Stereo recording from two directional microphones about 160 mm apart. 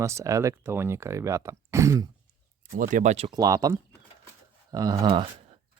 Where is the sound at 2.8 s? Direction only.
55° right (ahead or behind).